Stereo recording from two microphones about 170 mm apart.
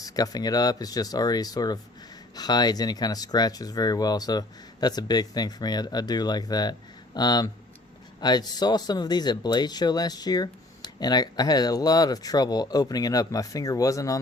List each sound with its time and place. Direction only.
0.0 s speech: 20° left (ahead or behind)